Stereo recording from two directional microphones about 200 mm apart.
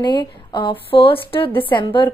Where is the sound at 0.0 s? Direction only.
20° left (ahead or behind).